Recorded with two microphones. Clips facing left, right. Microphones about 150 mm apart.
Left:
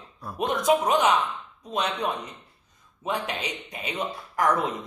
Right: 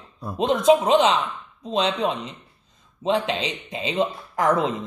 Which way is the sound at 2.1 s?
90° right.